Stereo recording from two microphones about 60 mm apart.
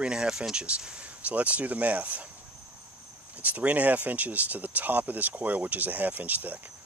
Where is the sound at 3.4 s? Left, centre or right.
Right.